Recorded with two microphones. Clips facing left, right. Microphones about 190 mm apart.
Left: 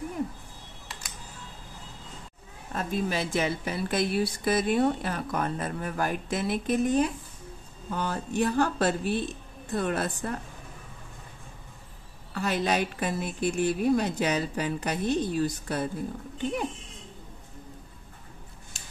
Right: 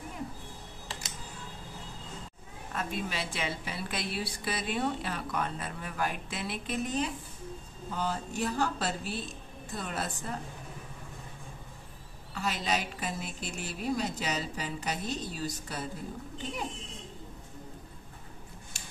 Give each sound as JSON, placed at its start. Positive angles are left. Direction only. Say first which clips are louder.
{"t": 2.7, "sound": "speech", "louder": "left 6 dB", "side_deg": 40}
{"t": 7.9, "sound": "a woman's voice", "louder": "left 4 dB", "side_deg": 60}
{"t": 12.4, "sound": "a woman's voice", "louder": "left 6 dB", "side_deg": 55}